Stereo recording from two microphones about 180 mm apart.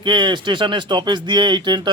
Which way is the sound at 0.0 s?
25° right (ahead or behind).